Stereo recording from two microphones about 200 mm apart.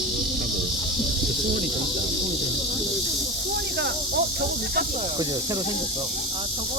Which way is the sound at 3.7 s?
55° right (ahead or behind).